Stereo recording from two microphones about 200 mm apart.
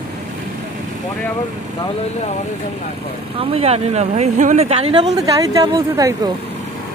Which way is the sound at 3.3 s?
30° right (ahead or behind).